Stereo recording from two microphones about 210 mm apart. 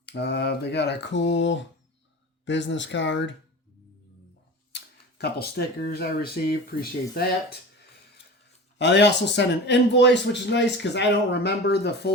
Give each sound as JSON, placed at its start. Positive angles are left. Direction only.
{"t": 0.0, "sound": "a man's voice", "side_deg": 55}
{"t": 4.7, "sound": "speech", "side_deg": 50}
{"t": 8.8, "sound": "a man's voice", "side_deg": 55}